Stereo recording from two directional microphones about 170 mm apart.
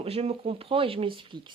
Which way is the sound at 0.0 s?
35° right (ahead or behind).